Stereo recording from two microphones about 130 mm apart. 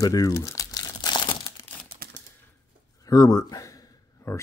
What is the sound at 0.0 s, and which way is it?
Crumpling, 25° left (ahead or behind).